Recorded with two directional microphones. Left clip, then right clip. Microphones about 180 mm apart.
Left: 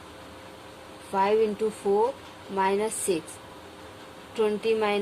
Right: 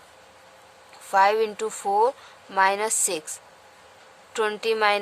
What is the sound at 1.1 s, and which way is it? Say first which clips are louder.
A woman's voice: right 4 dB; 50° right (ahead or behind).